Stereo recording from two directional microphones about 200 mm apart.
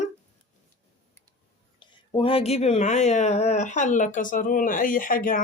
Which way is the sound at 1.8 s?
25° left (ahead or behind).